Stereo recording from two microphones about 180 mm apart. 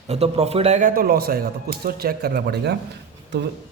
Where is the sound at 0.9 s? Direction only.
60° right (ahead or behind).